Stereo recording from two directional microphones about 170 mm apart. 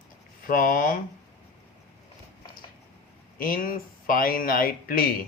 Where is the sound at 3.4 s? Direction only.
55° left (ahead or behind).